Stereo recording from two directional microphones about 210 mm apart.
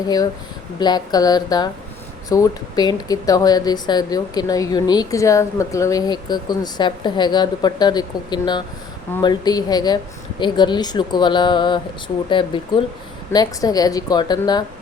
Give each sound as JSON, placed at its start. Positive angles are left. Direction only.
{"t": 0.8, "sound": "speech", "side_deg": 20}